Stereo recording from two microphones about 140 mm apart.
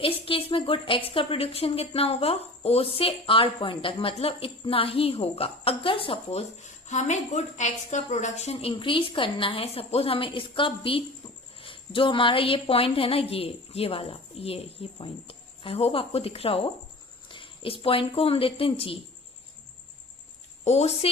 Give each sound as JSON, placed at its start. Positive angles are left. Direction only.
{"t": 0.0, "sound": "a woman's voice", "side_deg": 40}
{"t": 6.6, "sound": "a woman's voice", "side_deg": 55}
{"t": 20.7, "sound": "a woman's voice", "side_deg": 50}